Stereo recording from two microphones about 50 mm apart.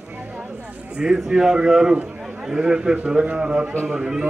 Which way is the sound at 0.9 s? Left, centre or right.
Centre.